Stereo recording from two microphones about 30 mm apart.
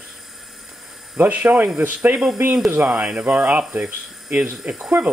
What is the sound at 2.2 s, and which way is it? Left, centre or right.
Speech, centre.